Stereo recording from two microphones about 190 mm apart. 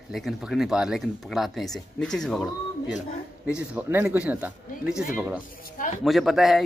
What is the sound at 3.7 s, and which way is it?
Speech, 10° right (ahead or behind).